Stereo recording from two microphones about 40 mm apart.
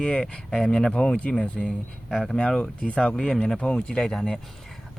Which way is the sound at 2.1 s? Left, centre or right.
Centre.